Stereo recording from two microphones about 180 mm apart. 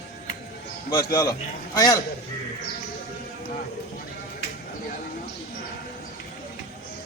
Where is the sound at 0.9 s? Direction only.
20° left (ahead or behind).